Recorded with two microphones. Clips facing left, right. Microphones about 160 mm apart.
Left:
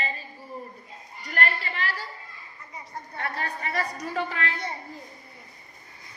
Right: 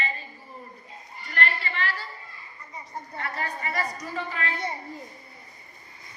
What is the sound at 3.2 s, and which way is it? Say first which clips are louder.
Speech: left 1 dB; 60° left (ahead or behind).